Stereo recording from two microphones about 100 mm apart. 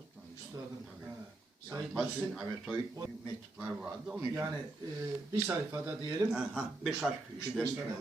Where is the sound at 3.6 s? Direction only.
10° right (ahead or behind).